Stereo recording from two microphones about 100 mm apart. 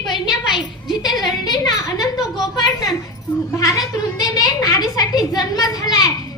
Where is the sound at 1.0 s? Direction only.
45° left (ahead or behind).